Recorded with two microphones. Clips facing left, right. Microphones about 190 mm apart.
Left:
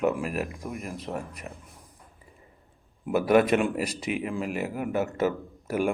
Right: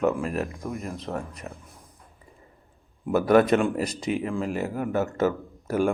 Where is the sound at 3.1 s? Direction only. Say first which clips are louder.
Right 2 dB; 10° left (ahead or behind).